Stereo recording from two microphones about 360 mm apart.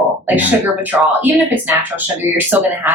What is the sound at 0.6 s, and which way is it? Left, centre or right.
Speech, centre.